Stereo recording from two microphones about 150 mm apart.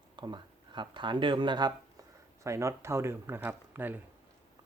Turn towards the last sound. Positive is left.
turn(degrees=-15)  # may be behind; listen again after turning